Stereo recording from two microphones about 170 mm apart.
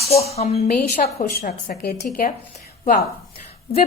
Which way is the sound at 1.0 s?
50° left (ahead or behind).